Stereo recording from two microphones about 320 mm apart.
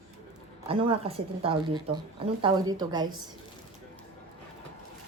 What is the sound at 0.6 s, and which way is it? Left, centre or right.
Speech, centre.